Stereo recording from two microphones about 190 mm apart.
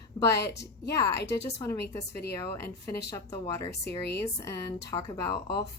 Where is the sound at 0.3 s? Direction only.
65° left (ahead or behind).